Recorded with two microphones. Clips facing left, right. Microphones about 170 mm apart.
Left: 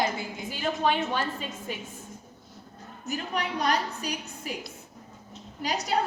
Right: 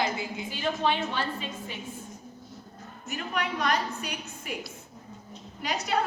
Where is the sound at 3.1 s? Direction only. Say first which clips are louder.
Left 1 dB; 35° left (ahead or behind).